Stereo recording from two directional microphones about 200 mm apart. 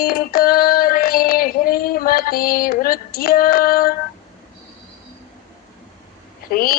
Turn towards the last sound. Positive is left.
turn(degrees=45)  # may be behind; listen again after turning